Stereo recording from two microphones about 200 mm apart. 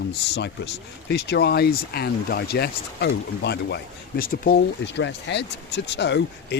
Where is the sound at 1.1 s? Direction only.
55° left (ahead or behind).